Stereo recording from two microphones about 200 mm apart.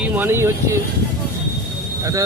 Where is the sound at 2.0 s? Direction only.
15° right (ahead or behind).